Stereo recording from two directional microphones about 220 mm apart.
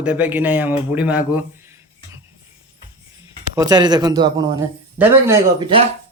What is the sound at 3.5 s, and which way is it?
Speech, 15° right (ahead or behind).